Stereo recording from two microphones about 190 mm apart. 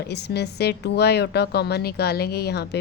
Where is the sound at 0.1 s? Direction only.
60° left (ahead or behind).